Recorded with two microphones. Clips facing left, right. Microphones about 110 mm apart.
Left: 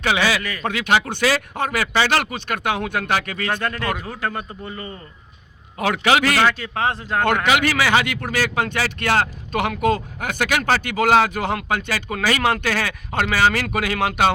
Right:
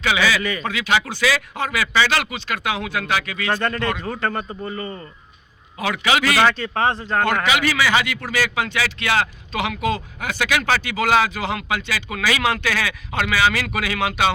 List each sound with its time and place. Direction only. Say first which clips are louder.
0.0 s speech: even; 40° left (ahead or behind)
3.5 s speech: right 2 dB; 5° left (ahead or behind)
4.4 s speech: right 4 dB; 5° right (ahead or behind)
5.8 s speech: left 2 dB; 50° left (ahead or behind)
6.4 s speech: right 1 dB; 5° left (ahead or behind)
7.4 s speech: left 1 dB; 50° left (ahead or behind)